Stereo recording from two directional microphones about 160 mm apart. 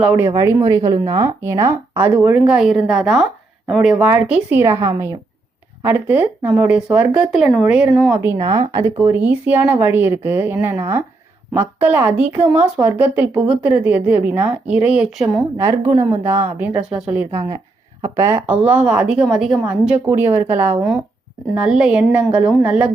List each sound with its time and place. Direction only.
0.0 s a woman's voice: 10° right (ahead or behind)
8.2 s speech: 20° right (ahead or behind); by 15.4 s centre (ahead or behind)
16.0 s a woman's voice: 15° right (ahead or behind)